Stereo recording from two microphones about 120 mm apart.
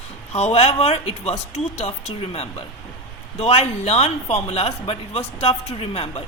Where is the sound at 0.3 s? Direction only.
60° left (ahead or behind).